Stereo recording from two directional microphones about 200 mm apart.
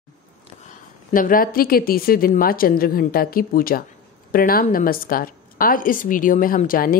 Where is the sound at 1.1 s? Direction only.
45° left (ahead or behind).